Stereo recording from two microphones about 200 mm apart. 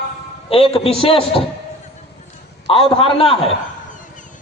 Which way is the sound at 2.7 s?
25° left (ahead or behind).